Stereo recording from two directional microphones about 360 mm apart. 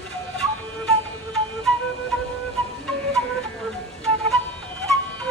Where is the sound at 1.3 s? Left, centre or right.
Centre.